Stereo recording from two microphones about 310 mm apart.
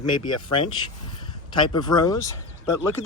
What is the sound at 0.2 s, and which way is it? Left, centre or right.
Speech, left.